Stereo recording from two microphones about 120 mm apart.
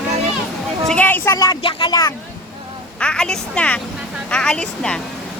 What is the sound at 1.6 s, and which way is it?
Speech, 35° left (ahead or behind).